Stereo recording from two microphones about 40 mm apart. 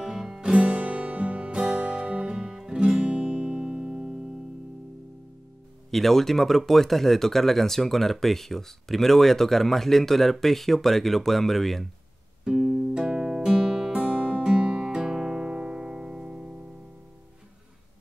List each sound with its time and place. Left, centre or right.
0.0 s music: centre
0.4 s music: right
5.9 s speech: centre
12.6 s music: centre
13.0 s music: centre
13.9 s music: right